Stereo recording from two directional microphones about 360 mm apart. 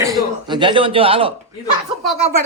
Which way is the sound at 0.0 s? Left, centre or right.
Centre.